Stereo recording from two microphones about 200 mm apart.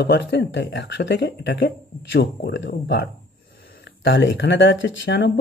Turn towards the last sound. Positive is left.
turn(degrees=65)  # may be behind; listen again after turning